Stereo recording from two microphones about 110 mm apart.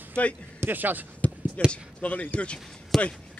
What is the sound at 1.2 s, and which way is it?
Basketball bounce, 10° left (ahead or behind).